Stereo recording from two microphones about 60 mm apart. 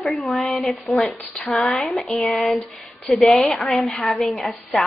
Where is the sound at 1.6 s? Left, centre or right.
Centre.